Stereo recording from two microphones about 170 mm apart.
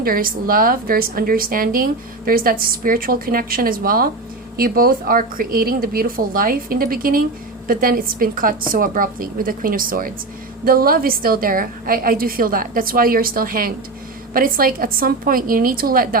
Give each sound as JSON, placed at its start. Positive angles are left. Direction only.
{"t": 0.0, "sound": "a woman's voice", "side_deg": -60}